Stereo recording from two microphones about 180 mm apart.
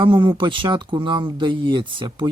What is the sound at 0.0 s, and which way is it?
Speech, 25° right (ahead or behind).